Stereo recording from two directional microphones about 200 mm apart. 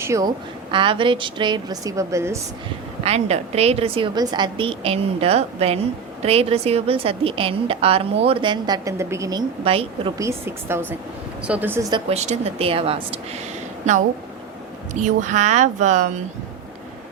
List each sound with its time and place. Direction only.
0.0 s a woman's voice: 15° right (ahead or behind)
3.0 s a woman's voice: 30° right (ahead or behind); by 9.4 s 15° right (ahead or behind)
9.6 s a woman's voice: 30° right (ahead or behind)
10.2 s a woman's voice: 15° right (ahead or behind); by 14.0 s 35° right (ahead or behind)
15.0 s speech: 40° right (ahead or behind)